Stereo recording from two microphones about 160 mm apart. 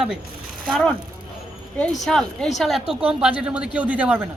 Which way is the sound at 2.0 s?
5° left (ahead or behind).